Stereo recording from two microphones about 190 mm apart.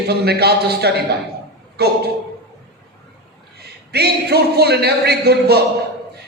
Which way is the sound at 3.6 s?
55° right (ahead or behind).